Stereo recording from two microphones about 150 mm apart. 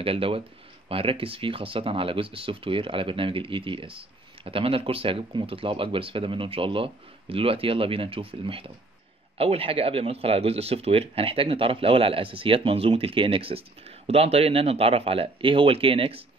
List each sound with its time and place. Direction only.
0.0 s speech: 40° right (ahead or behind)